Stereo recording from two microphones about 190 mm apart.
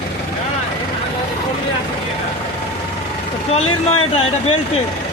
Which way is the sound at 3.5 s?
30° left (ahead or behind).